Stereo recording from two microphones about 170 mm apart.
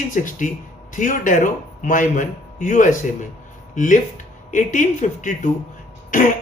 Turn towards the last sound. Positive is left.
turn(degrees=50)  # may be behind; listen again after turning